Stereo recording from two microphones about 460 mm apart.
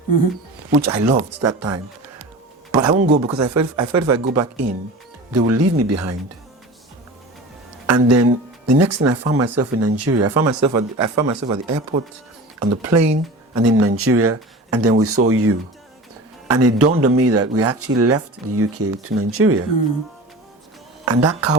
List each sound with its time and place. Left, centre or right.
0.8 s speech: right
7.9 s speech: right
21.0 s speech: right